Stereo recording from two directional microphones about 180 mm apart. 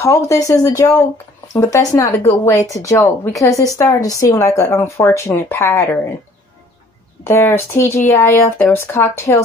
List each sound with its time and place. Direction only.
0.0 s speech: 15° left (ahead or behind)
7.2 s speech: 15° left (ahead or behind)